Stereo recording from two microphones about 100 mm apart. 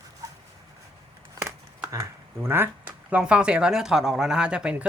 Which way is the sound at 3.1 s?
10° right (ahead or behind).